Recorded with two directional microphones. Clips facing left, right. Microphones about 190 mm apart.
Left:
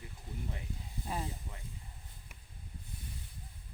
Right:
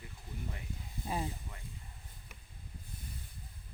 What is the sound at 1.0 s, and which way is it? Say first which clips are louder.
Speech: right 2 dB; 15° right (ahead or behind).